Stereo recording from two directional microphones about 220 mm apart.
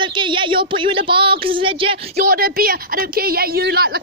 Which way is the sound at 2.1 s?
45° right (ahead or behind).